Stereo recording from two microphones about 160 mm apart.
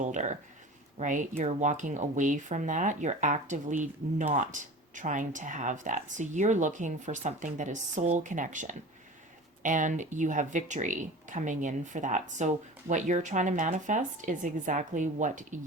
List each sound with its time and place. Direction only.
0.0 s speech: 50° right (ahead or behind)